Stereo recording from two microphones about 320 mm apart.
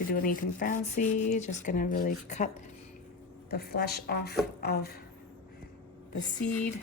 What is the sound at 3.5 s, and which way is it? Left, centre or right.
Speech, left.